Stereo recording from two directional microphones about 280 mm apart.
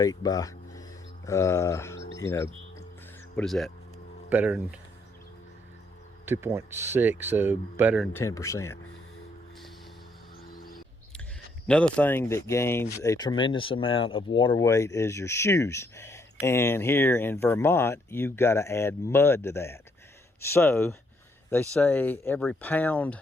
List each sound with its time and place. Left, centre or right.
0.0 s a sound: centre
3.3 s speech: centre
6.2 s speech: centre
10.4 s music: left
11.7 s speech: centre